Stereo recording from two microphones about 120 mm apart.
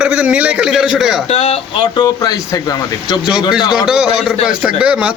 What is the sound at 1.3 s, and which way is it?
Speech, 55° left (ahead or behind).